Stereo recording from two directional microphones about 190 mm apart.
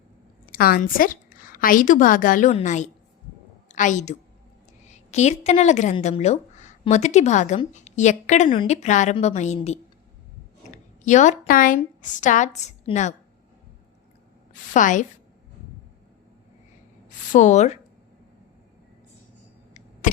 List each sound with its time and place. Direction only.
0.4 s a woman's voice: 50° left (ahead or behind); by 9.6 s 35° left (ahead or behind)
11.0 s a woman's voice: 40° left (ahead or behind)
14.7 s a woman's voice: 40° left (ahead or behind)
17.3 s a woman's voice: 40° left (ahead or behind)